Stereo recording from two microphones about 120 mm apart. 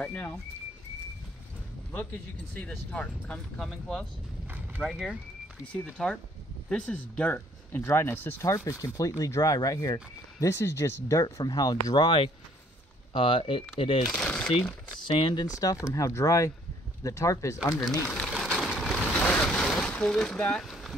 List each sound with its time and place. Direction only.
0.0 s speech: 10° left (ahead or behind)
2.6 s speech: 10° left (ahead or behind); by 14.0 s 50° left (ahead or behind)
14.0 s speech: 5° left (ahead or behind)
15.0 s speech: 45° left (ahead or behind)
15.4 s speech: 30° left (ahead or behind)
18.0 s speech: 10° left (ahead or behind)
18.3 s vehicle: centre (ahead or behind)